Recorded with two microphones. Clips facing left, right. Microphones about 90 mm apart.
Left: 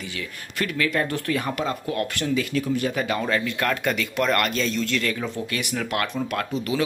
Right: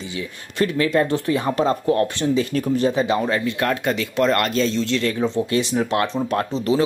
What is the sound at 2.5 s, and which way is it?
Speech, 40° right (ahead or behind).